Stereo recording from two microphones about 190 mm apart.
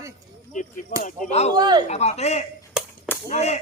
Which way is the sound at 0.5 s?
45° left (ahead or behind).